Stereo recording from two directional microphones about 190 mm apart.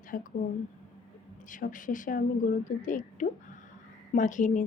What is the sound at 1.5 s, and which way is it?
A woman's voice, 45° left (ahead or behind).